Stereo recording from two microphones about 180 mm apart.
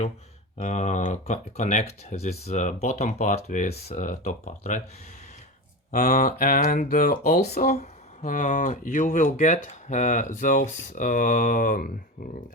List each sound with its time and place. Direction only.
0.6 s speech: 40° left (ahead or behind)
5.9 s speech: 45° left (ahead or behind)
7.4 s speech: 60° left (ahead or behind)
7.7 s speech: 40° left (ahead or behind)